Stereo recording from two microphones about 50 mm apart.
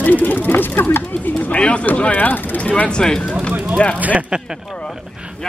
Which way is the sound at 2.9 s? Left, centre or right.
Centre.